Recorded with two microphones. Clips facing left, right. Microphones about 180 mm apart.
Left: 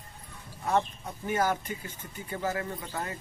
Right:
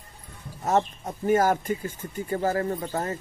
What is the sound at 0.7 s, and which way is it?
Speech, 45° right (ahead or behind).